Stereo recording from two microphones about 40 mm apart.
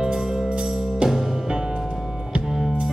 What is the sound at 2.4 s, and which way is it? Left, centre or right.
Music, centre.